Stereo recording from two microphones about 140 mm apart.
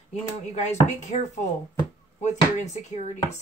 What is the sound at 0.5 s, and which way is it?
Speech, 55° left (ahead or behind).